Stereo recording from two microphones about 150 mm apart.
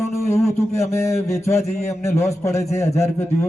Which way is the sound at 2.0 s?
20° left (ahead or behind).